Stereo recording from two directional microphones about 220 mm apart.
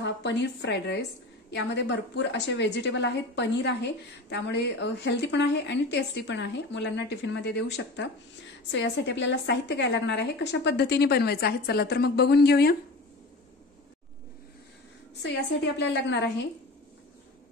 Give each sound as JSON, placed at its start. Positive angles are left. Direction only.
{"t": 0.0, "sound": "a woman's voice", "side_deg": 55}
{"t": 15.2, "sound": "a woman's voice", "side_deg": 50}